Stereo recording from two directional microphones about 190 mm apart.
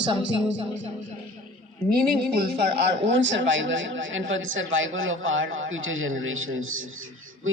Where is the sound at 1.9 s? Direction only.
55° right (ahead or behind).